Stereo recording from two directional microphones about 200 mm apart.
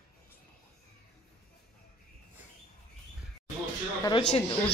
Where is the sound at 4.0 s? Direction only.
20° left (ahead or behind).